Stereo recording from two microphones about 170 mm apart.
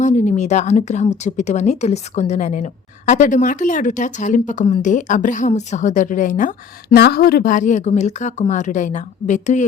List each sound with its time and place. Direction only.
0.0 s speech: 45° left (ahead or behind)
6.9 s speech: 65° left (ahead or behind); by 9.6 s 45° left (ahead or behind)